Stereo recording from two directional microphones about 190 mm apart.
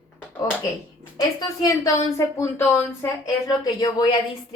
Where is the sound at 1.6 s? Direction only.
15° left (ahead or behind).